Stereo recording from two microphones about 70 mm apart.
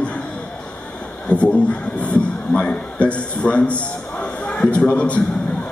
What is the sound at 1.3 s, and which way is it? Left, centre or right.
A man's voice, centre.